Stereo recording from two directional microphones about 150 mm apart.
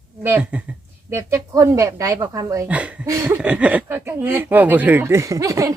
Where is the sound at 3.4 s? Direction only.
10° right (ahead or behind).